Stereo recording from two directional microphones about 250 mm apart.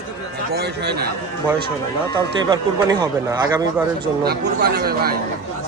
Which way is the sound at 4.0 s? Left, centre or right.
Right.